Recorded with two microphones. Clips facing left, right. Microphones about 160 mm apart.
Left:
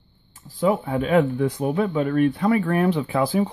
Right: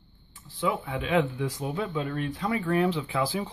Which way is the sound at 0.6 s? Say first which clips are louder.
Left 8 dB; 45° left (ahead or behind).